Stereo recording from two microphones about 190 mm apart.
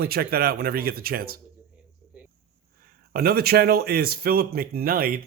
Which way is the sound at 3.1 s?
55° right (ahead or behind).